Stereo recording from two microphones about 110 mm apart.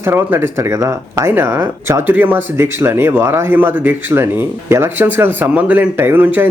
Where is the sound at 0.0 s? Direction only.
20° right (ahead or behind).